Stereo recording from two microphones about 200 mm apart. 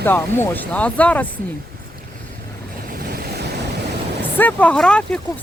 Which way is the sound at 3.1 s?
50° right (ahead or behind).